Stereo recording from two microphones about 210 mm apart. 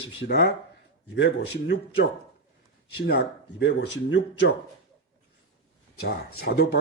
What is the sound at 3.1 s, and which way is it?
Speech, 55° left (ahead or behind).